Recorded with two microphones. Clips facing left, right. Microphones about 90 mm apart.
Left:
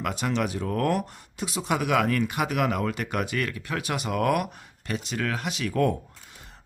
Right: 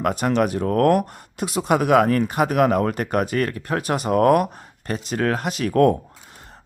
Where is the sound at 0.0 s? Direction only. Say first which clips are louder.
Right 7 dB; 45° right (ahead or behind).